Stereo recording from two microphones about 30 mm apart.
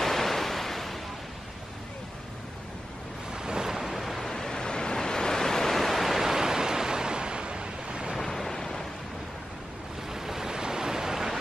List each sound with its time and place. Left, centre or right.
0.0 s waves: centre
3.3 s waves: right
3.7 s waves: centre
4.0 s vehicle: centre
4.3 s waves: left
5.8 s waves: centre; by 8.2 s right
8.2 s waves: centre
10.0 s waves: centre